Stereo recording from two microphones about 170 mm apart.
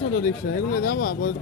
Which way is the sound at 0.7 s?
55° left (ahead or behind).